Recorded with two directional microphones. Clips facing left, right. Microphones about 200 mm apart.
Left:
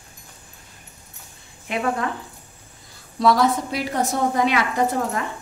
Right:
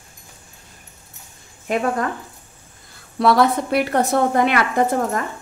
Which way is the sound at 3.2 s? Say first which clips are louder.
Right 2 dB; 60° right (ahead or behind).